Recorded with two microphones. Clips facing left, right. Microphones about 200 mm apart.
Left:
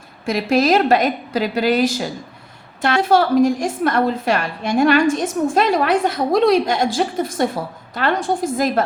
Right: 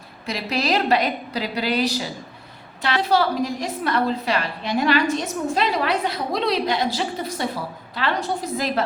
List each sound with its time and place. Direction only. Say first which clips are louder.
0.3 s a woman's voice: left 8 dB; 50° left (ahead or behind)